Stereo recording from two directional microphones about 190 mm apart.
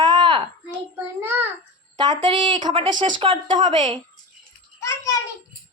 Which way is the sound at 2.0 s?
25° right (ahead or behind).